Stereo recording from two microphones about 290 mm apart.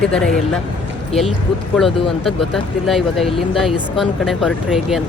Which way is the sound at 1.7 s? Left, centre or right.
Centre.